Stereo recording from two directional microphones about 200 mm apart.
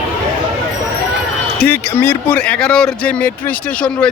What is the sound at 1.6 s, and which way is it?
Speech, 10° left (ahead or behind).